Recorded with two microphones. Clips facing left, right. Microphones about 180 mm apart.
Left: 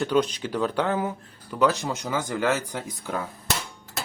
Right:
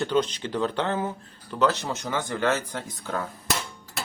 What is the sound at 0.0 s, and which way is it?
Speech, 10° left (ahead or behind).